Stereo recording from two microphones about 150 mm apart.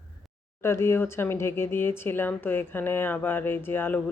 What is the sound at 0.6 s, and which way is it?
Speech, 15° left (ahead or behind).